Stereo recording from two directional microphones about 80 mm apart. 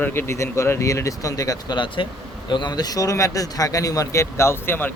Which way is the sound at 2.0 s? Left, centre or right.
Left.